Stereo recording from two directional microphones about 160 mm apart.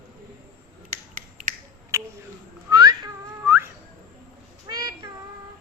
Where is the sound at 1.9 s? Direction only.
15° right (ahead or behind).